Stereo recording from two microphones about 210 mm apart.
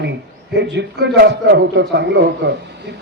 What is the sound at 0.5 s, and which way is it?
A man's voice, 55° right (ahead or behind).